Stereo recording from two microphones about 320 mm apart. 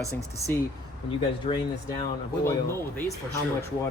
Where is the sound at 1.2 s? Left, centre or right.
Centre.